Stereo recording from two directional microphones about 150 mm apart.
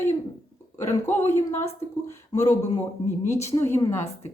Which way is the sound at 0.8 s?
20° left (ahead or behind).